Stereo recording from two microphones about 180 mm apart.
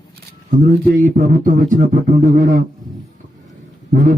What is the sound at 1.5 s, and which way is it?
Speech, 50° right (ahead or behind).